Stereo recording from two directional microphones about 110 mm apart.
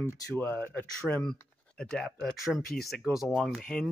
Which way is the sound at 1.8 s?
5° left (ahead or behind).